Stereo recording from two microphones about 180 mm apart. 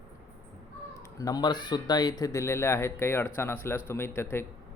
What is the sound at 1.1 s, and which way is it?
Speech, 20° left (ahead or behind).